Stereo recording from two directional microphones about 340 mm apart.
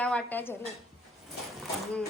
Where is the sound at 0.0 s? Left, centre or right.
Centre.